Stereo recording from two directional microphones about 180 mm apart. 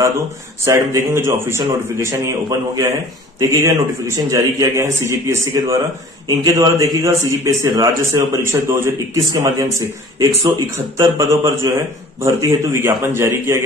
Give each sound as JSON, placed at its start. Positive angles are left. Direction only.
{"t": 0.7, "sound": "a man's voice", "side_deg": -15}